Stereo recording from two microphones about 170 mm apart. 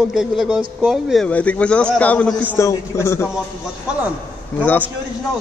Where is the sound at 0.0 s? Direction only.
5° right (ahead or behind).